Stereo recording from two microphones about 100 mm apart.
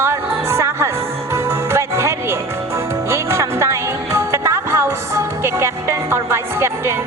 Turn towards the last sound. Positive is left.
turn(degrees=-25)  # may be behind; listen again after turning